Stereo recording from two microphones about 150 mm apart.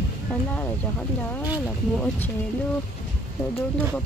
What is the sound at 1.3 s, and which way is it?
Speech, 10° left (ahead or behind).